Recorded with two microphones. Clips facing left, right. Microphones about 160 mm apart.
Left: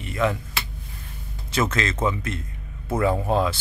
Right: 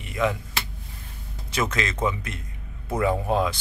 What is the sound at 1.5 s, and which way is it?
Speech, 15° right (ahead or behind).